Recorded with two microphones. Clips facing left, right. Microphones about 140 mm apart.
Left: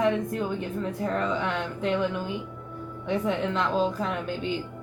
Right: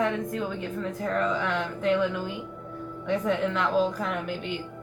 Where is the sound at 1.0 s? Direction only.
10° left (ahead or behind).